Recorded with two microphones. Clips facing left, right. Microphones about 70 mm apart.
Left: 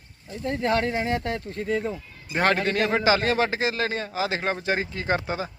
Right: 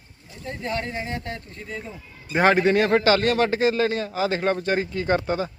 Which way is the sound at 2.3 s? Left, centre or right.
Centre.